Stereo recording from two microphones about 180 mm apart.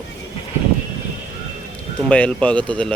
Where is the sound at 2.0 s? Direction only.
5° left (ahead or behind).